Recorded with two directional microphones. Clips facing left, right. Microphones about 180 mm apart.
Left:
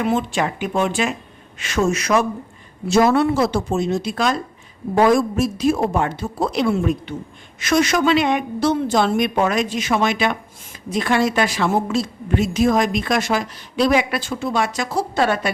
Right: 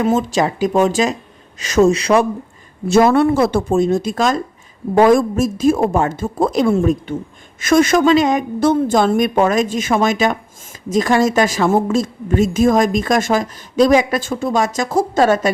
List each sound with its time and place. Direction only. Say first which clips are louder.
0.0 s speech: right 4 dB; 40° right (ahead or behind)
2.8 s a woman's voice: right 3 dB; 50° right (ahead or behind)